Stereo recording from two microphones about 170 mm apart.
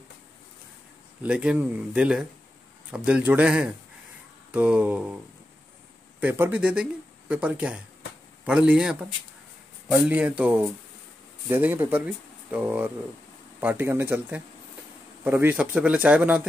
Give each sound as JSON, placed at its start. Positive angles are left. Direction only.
{"t": 1.2, "sound": "speech", "side_deg": -5}
{"t": 6.2, "sound": "speech", "side_deg": -10}
{"t": 9.9, "sound": "speech", "side_deg": -10}